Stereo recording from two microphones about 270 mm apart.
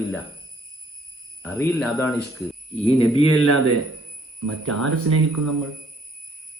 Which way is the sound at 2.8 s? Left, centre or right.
Left.